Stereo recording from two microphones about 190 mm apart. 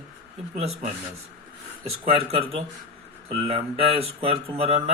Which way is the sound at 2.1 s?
30° right (ahead or behind).